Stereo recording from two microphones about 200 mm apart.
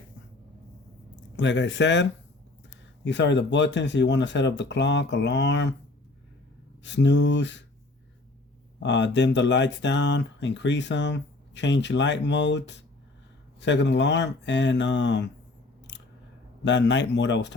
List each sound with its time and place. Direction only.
1.4 s speech: 65° left (ahead or behind)
6.8 s speech: 60° left (ahead or behind)
8.8 s speech: 60° left (ahead or behind)
16.6 s speech: 65° left (ahead or behind)